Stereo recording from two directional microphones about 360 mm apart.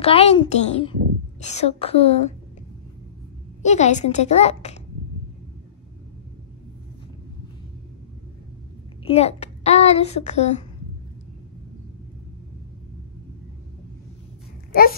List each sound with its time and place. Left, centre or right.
0.0 s a child's voice: centre
3.6 s a woman's voice: centre
9.0 s a child's voice: centre
14.7 s speech: left